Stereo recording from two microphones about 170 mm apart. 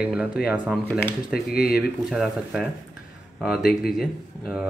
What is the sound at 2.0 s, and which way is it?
Speech, 5° right (ahead or behind).